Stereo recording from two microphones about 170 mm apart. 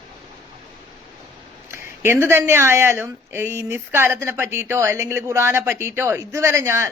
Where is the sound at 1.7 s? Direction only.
15° right (ahead or behind).